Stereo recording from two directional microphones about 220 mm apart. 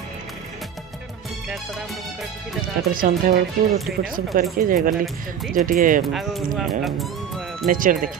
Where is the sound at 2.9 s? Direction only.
40° right (ahead or behind).